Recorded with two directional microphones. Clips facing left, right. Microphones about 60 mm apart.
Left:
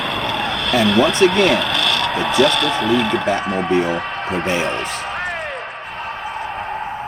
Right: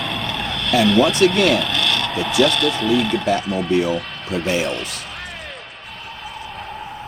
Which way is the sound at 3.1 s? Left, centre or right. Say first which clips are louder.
Left 1 dB; left.